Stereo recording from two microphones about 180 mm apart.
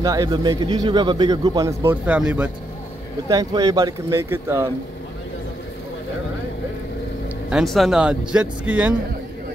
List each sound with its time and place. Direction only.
0.0 s speech: 20° right (ahead or behind)
3.3 s speech: 20° right (ahead or behind)
7.4 s speech: centre (ahead or behind)